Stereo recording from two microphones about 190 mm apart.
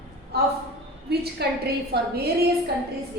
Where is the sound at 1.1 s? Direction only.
55° right (ahead or behind).